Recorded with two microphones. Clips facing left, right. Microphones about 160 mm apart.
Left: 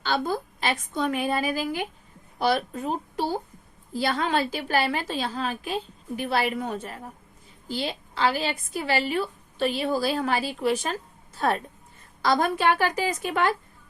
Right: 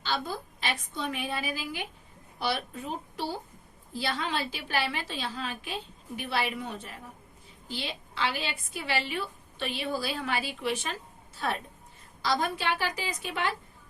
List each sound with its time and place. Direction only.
0.0 s a woman's voice: 50° left (ahead or behind)